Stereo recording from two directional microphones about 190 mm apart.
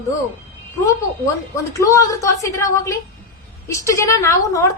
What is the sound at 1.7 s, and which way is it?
A woman's voice, 15° left (ahead or behind).